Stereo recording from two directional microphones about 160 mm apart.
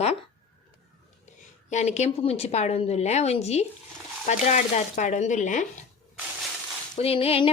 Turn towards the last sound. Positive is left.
turn(degrees=35)  # may be behind; listen again after turning